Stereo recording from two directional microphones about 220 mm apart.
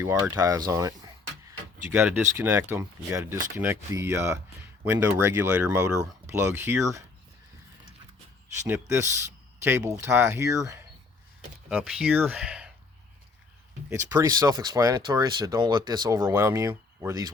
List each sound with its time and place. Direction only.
0.0 s a sound: 10° right (ahead or behind)
2.0 s speech: 10° right (ahead or behind)
8.6 s speech: 10° right (ahead or behind)
13.9 s speech: 15° right (ahead or behind)